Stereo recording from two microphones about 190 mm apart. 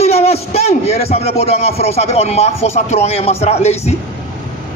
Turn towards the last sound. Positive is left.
turn(degrees=35)  # may be behind; listen again after turning